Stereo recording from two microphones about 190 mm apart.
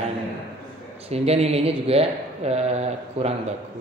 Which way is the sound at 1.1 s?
35° right (ahead or behind).